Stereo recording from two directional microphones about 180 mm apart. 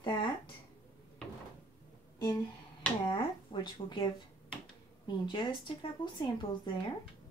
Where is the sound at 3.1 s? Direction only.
25° left (ahead or behind).